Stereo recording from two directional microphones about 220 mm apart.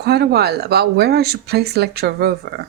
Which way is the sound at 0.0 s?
45° right (ahead or behind).